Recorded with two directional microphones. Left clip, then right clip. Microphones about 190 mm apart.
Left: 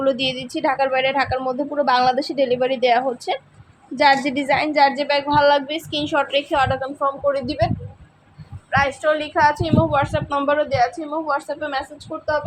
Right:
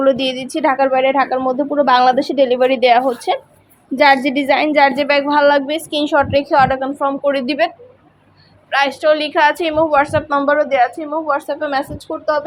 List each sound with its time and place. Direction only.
0.0 s a woman's voice: 25° right (ahead or behind)
8.7 s a woman's voice: 20° right (ahead or behind)